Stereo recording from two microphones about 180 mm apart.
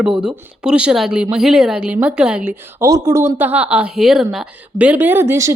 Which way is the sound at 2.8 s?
20° right (ahead or behind).